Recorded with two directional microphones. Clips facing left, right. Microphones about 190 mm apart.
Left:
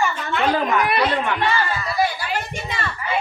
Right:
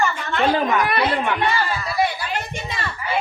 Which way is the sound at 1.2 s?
15° right (ahead or behind).